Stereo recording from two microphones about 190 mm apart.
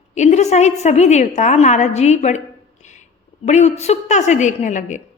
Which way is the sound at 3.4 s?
35° left (ahead or behind).